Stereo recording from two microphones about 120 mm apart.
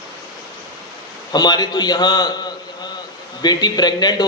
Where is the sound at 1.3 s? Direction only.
35° left (ahead or behind).